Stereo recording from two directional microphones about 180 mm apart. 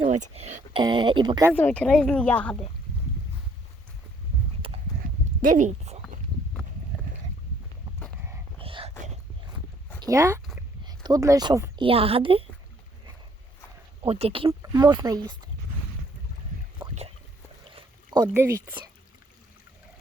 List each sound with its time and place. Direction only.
0.0 s speech: 35° right (ahead or behind)
1.5 s speech: 10° left (ahead or behind)
4.6 s horse: 30° right (ahead or behind)
5.5 s a sound: 40° right (ahead or behind)
8.5 s whispering: 30° right (ahead or behind)
10.0 s speech: 15° right (ahead or behind)
11.9 s a woman's voice: 30° right (ahead or behind)
14.1 s a woman's voice: 35° right (ahead or behind)
14.6 s speech: 20° right (ahead or behind)
17.7 s a sound: 20° right (ahead or behind)